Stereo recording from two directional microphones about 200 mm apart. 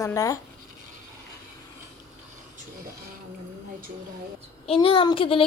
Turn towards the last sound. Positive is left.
turn(degrees=25)  # may be behind; listen again after turning